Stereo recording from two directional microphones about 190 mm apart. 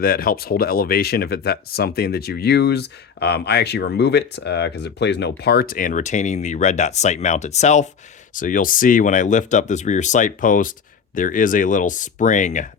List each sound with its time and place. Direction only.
0.0 s speech: 50° left (ahead or behind)